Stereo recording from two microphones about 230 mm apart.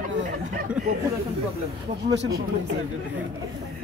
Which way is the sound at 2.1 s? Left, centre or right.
Right.